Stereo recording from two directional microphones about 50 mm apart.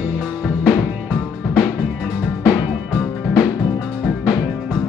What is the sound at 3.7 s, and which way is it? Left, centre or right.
Music, centre.